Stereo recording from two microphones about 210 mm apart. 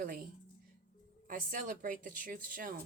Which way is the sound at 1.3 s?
40° right (ahead or behind).